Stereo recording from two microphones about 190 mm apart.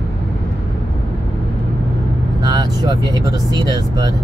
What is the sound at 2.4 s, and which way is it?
Vehicle, 20° right (ahead or behind).